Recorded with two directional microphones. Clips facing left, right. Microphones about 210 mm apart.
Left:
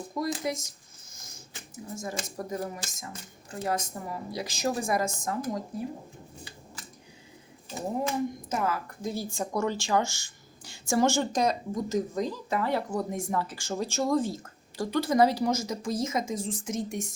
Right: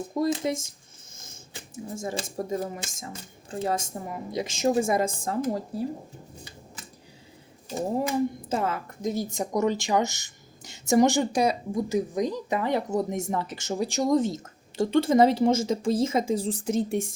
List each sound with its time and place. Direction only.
0.2 s speech: 25° right (ahead or behind)
1.7 s speech: 30° right (ahead or behind)
8.4 s speech: 30° right (ahead or behind)